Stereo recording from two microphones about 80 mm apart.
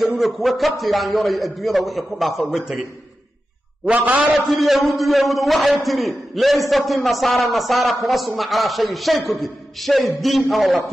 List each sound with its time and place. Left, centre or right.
0.0 s a man's voice: centre
3.9 s a man's voice: centre
4.3 s a man's voice: centre